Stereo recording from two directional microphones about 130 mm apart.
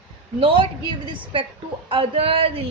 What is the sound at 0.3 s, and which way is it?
Speech, 45° right (ahead or behind).